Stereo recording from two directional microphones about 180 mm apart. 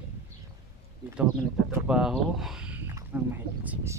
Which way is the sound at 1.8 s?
5° right (ahead or behind).